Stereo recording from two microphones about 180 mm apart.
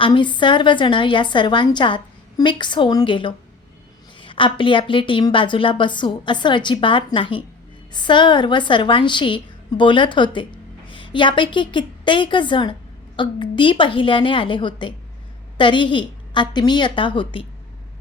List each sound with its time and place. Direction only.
0.0 s a woman's voice: 25° left (ahead or behind)